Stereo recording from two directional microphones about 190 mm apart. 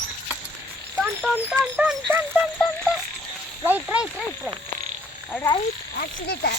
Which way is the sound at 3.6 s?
10° right (ahead or behind).